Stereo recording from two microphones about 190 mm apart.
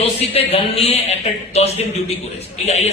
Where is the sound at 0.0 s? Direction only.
30° left (ahead or behind).